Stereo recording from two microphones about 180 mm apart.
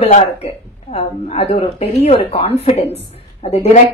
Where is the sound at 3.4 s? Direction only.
35° left (ahead or behind).